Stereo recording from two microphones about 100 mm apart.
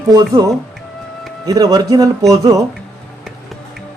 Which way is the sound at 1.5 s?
40° right (ahead or behind).